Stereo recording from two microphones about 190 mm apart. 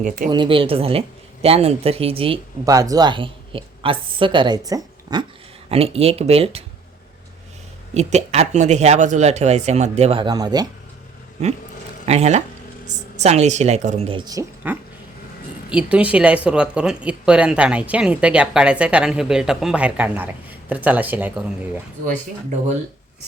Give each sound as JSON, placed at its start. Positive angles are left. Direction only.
{"t": 0.3, "sound": "speech", "side_deg": -25}
{"t": 2.6, "sound": "speech", "side_deg": -20}
{"t": 5.6, "sound": "speech", "side_deg": -30}
{"t": 7.9, "sound": "speech", "side_deg": -35}
{"t": 12.0, "sound": "speech", "side_deg": -35}
{"t": 14.6, "sound": "speech", "side_deg": -10}